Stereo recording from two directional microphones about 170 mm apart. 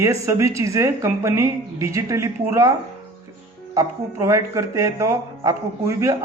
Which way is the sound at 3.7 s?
20° right (ahead or behind).